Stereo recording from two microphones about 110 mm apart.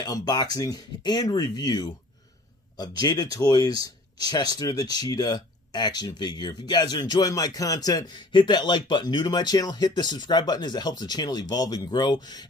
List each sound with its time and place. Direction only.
0.0 s speech: 35° left (ahead or behind)